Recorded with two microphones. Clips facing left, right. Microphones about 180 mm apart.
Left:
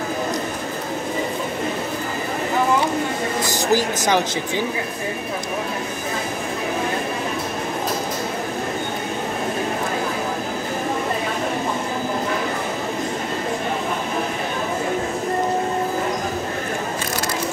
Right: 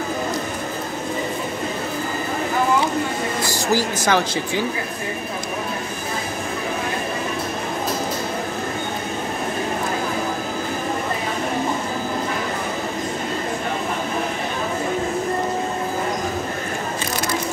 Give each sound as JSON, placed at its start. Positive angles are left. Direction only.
{"t": 3.4, "sound": "a woman's voice", "side_deg": 15}